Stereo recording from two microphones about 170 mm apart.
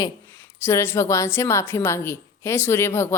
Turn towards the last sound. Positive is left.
turn(degrees=15)  # may be behind; listen again after turning